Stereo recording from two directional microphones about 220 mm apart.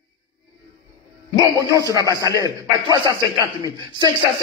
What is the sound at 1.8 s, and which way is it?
A man's voice, 15° right (ahead or behind).